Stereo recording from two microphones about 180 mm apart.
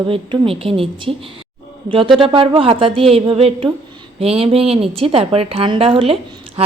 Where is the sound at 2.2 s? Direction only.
30° right (ahead or behind).